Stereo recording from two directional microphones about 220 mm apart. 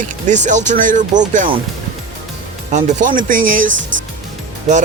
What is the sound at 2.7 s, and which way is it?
Speech, 35° right (ahead or behind).